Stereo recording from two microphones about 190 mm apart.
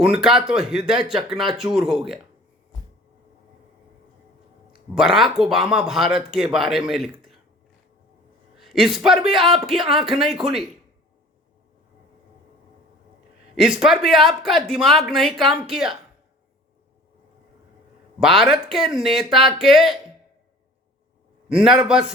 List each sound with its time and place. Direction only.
0.0 s speech: 5° right (ahead or behind)
4.9 s speech: centre (ahead or behind)
8.5 s a sound: centre (ahead or behind)
9.0 s speech: centre (ahead or behind)
13.6 s speech: 5° right (ahead or behind)
18.2 s speech: centre (ahead or behind)